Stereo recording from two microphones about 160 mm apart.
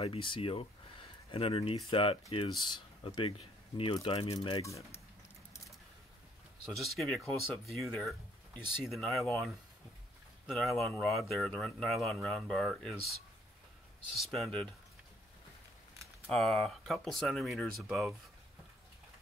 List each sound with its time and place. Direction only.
0.0 s speech: 35° left (ahead or behind)
4.6 s speech: 20° left (ahead or behind)
6.6 s speech: centre (ahead or behind)
10.6 s speech: centre (ahead or behind)
14.3 s speech: 5° left (ahead or behind)
16.3 s speech: centre (ahead or behind)